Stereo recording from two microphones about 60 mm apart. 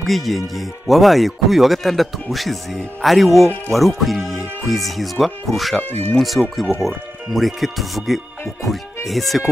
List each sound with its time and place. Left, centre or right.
0.0 s speech: centre
5.8 s speech: left
6.1 s speech: centre